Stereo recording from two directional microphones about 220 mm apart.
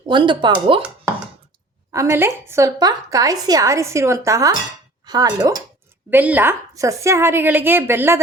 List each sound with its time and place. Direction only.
0.1 s speech: 20° right (ahead or behind)
1.9 s a woman's voice: 15° right (ahead or behind)